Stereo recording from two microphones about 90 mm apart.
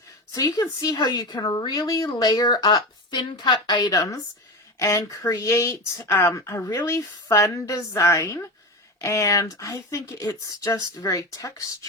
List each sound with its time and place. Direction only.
0.3 s a woman's voice: 45° left (ahead or behind)